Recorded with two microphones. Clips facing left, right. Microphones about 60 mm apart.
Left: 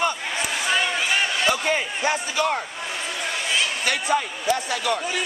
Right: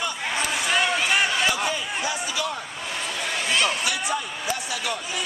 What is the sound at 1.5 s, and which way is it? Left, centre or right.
Speech, left.